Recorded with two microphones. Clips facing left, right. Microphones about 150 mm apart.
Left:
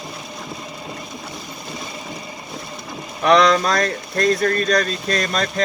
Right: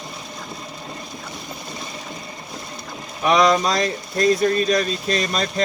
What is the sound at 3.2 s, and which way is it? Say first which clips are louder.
Speech: left 2 dB; centre (ahead or behind).